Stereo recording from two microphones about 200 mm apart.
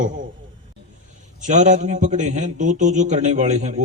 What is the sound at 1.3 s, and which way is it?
A man's voice, 40° right (ahead or behind).